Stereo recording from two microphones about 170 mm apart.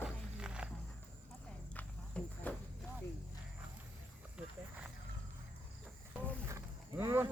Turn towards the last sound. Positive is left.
turn(degrees=-15)  # may be behind; listen again after turning